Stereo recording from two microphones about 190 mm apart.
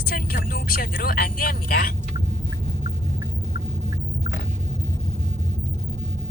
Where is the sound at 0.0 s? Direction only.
50° left (ahead or behind).